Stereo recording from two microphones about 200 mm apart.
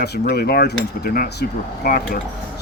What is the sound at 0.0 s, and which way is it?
Speech, 55° left (ahead or behind).